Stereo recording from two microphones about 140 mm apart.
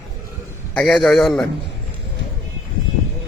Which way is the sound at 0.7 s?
5° left (ahead or behind).